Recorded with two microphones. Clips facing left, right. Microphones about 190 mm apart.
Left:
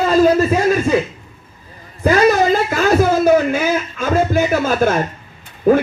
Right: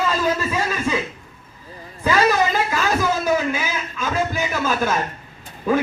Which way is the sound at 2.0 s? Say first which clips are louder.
Left 6 dB; 50° left (ahead or behind).